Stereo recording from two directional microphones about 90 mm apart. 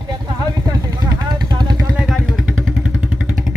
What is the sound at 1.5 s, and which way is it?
Vehicle, 50° right (ahead or behind).